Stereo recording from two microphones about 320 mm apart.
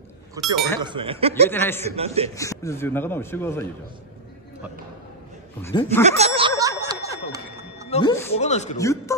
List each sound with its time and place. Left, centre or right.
0.4 s speech: centre
1.5 s a man's voice: centre
1.9 s a man's voice: centre
2.3 s a man's voice: centre
5.6 s a man's voice: centre
6.0 s a sound: centre
7.9 s a man's voice: centre
8.7 s a man's voice: centre